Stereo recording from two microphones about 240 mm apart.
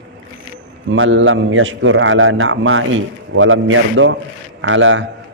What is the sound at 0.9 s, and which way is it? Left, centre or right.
A man's voice, right.